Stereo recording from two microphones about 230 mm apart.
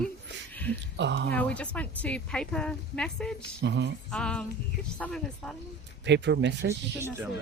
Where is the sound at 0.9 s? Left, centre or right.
Right.